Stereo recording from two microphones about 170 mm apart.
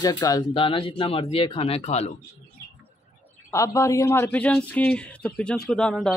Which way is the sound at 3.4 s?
20° left (ahead or behind).